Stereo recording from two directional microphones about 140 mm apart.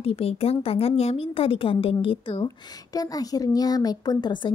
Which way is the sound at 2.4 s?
25° left (ahead or behind).